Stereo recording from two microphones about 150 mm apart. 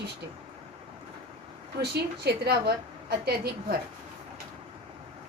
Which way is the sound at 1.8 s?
90° right.